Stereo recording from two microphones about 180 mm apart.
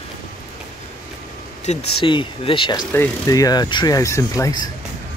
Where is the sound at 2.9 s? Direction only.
15° left (ahead or behind).